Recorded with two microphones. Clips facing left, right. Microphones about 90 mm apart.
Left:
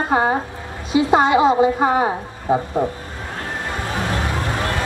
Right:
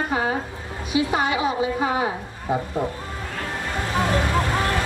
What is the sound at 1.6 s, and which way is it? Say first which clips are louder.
Speech: left 6 dB; 40° left (ahead or behind).